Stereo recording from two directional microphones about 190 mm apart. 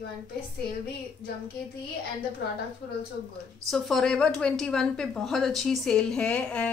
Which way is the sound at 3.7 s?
Centre (ahead or behind).